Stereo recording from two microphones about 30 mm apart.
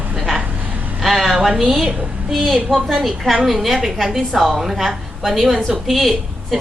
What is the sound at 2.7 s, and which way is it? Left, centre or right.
Speech, centre.